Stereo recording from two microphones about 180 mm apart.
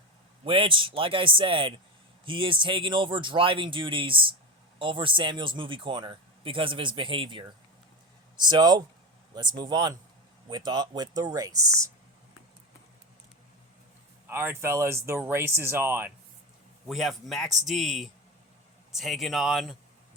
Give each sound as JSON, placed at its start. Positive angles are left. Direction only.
{"t": 0.4, "sound": "speech", "side_deg": -30}
{"t": 14.3, "sound": "speech", "side_deg": -10}
{"t": 16.9, "sound": "speech", "side_deg": 0}